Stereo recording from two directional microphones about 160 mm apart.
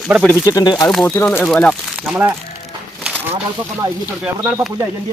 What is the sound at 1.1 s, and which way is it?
Speech, 15° left (ahead or behind).